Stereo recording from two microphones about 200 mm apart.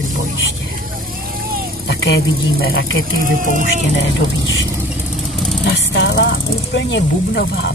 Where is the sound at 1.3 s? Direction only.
45° right (ahead or behind).